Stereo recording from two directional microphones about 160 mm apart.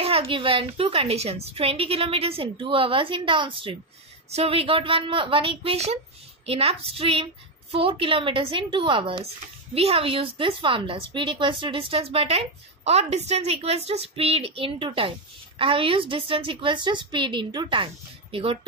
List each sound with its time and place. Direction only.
0.0 s a woman's voice: 35° right (ahead or behind)